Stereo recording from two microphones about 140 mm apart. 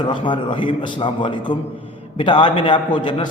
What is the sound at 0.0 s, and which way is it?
A man's voice, 35° left (ahead or behind).